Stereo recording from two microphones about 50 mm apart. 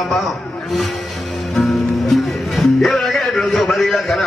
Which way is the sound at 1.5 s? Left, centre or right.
Centre.